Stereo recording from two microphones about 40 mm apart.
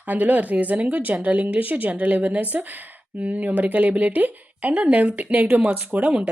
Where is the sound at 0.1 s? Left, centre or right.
Right.